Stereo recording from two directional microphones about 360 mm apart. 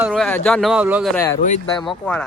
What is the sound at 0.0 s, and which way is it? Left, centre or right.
Speech, centre.